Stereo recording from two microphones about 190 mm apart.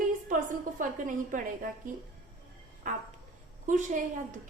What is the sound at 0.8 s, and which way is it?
A woman's voice, 45° right (ahead or behind).